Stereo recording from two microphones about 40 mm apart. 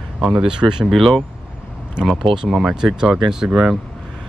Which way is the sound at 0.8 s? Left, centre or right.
Centre.